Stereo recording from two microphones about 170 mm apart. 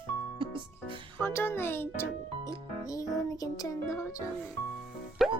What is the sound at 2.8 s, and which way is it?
Music, 20° left (ahead or behind).